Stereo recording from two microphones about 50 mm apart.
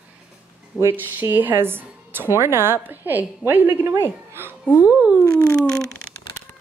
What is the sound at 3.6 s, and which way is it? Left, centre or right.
Speech, right.